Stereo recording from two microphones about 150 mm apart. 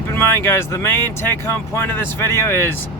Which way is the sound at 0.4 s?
15° left (ahead or behind).